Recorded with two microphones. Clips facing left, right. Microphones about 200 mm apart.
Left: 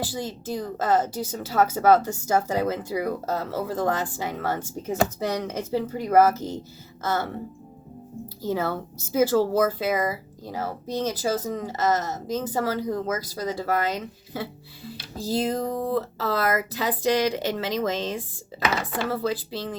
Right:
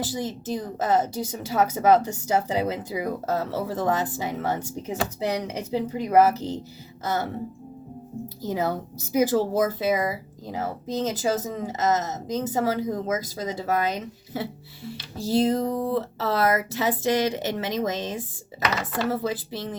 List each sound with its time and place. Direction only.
0.0 s speech: 20° right (ahead or behind)
8.4 s speech: 20° right (ahead or behind)